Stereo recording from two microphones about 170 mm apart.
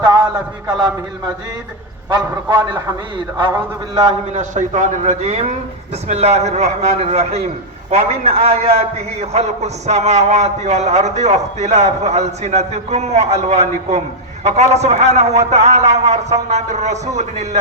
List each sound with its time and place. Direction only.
0.0 s a sound: 20° right (ahead or behind)
2.0 s a man's voice: 25° right (ahead or behind)
4.3 s a man's voice: 45° right (ahead or behind)